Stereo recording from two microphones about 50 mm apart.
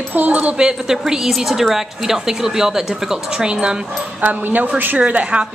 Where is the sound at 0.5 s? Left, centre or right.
Centre.